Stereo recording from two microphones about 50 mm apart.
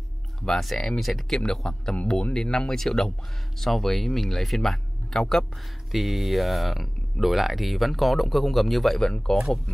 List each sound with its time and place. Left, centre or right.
0.4 s speech: centre
1.4 s speech: centre
9.1 s speech: centre